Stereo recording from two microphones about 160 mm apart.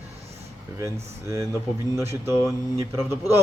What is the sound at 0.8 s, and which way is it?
Speech, 20° right (ahead or behind).